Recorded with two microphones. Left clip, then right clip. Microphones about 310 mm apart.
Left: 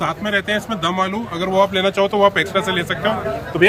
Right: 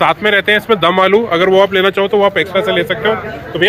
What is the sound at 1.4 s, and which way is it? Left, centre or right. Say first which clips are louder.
A man's voice: right 2 dB; centre.